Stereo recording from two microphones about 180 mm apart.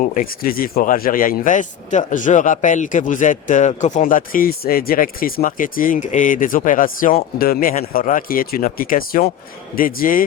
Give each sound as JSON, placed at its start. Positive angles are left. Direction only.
{"t": 0.1, "sound": "speech", "side_deg": 50}